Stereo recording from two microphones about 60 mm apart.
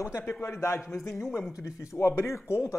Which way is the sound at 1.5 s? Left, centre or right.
Left.